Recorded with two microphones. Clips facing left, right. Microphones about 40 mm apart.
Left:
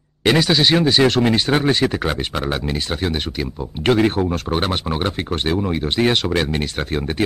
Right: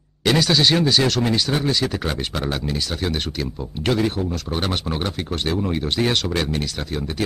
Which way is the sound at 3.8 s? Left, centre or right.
Left.